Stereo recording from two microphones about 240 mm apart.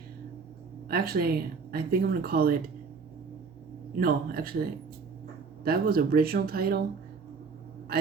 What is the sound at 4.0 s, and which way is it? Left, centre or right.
Speech, right.